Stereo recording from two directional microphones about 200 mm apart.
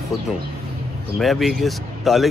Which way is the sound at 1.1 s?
Centre (ahead or behind).